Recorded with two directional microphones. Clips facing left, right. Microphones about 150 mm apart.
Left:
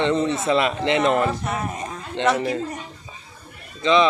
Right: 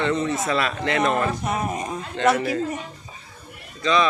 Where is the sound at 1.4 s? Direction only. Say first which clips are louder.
Right 2 dB; 15° right (ahead or behind).